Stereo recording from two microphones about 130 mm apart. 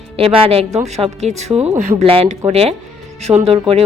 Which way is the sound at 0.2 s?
45° right (ahead or behind).